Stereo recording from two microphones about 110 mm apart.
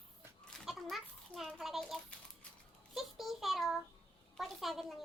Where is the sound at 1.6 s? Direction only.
Centre (ahead or behind).